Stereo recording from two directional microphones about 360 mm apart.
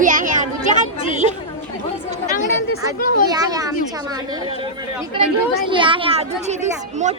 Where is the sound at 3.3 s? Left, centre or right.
Centre.